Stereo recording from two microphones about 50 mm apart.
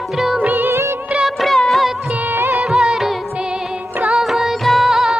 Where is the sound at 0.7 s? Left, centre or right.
Right.